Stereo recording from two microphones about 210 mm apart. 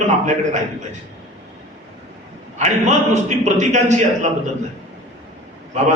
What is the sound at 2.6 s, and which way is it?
A man's voice, 35° right (ahead or behind).